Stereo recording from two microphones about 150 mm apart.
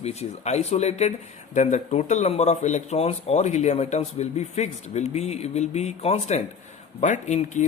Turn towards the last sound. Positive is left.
turn(degrees=50)  # may be behind; listen again after turning